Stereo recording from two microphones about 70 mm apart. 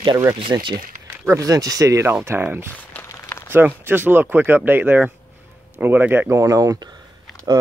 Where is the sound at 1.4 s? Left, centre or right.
Right.